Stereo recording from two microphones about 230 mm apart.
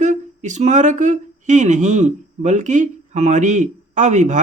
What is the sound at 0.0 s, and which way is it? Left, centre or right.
Speech, right.